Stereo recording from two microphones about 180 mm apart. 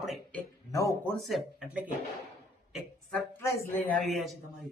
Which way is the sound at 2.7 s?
Centre (ahead or behind).